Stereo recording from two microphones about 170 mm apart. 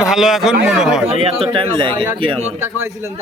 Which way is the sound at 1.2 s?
35° right (ahead or behind).